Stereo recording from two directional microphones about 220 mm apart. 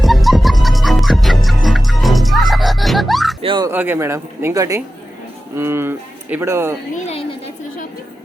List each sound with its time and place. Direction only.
0.0 s music: centre (ahead or behind)
3.4 s bow-wow: 20° right (ahead or behind)
3.7 s speech: 10° right (ahead or behind)
6.9 s a woman's voice: 30° left (ahead or behind)